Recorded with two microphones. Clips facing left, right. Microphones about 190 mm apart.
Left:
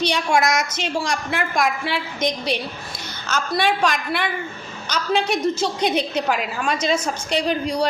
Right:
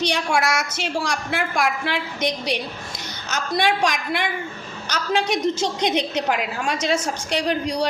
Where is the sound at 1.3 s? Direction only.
10° right (ahead or behind).